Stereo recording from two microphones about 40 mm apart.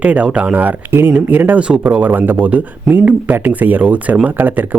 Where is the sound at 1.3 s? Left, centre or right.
Right.